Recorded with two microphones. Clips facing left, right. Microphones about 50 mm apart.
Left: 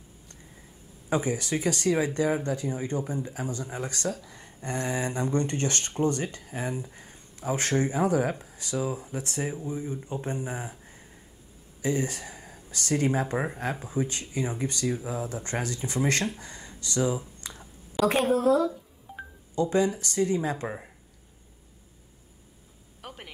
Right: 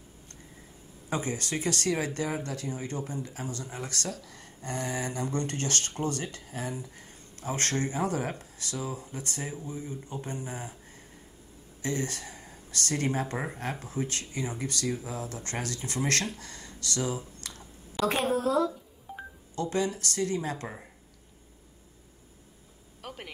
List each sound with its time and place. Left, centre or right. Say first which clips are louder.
1.1 s speech: left 4 dB; centre
15.0 s speech: left 4 dB; centre
17.9 s a woman's voice: left 4 dB; centre
19.6 s speech: left 5 dB; left
23.0 s a sound: right 1 dB; centre